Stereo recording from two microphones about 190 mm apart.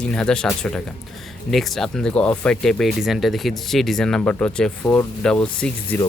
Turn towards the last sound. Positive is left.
turn(degrees=5)  # may be behind; listen again after turning